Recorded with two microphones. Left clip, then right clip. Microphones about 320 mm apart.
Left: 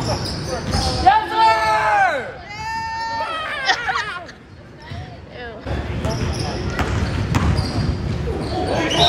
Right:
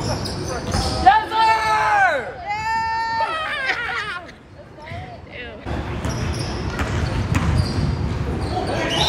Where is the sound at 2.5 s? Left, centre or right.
Right.